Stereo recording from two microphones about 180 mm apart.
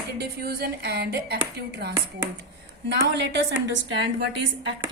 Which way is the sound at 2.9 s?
75° right (ahead or behind).